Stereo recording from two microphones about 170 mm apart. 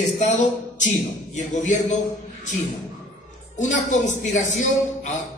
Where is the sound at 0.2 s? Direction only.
45° left (ahead or behind).